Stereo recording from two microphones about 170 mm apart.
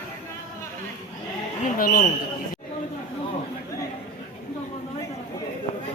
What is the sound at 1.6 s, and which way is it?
Speech, 60° left (ahead or behind).